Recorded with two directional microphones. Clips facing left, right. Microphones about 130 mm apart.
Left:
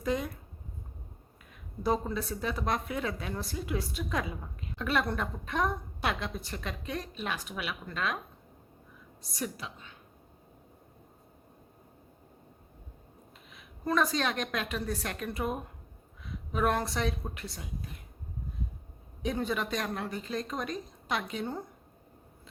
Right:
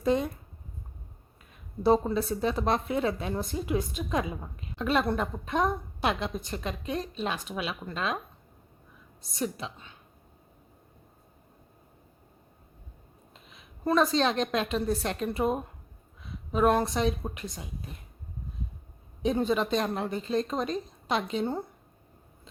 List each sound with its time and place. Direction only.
0.0 s speech: 25° right (ahead or behind)
1.8 s a woman's voice: 30° right (ahead or behind)
9.3 s a woman's voice: 25° right (ahead or behind)
13.5 s a woman's voice: 25° right (ahead or behind)
19.2 s a woman's voice: 25° right (ahead or behind)